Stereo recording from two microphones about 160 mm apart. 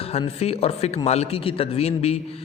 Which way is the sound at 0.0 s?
40° left (ahead or behind).